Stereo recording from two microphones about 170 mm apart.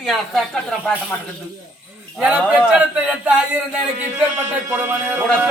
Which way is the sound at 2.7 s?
10° right (ahead or behind).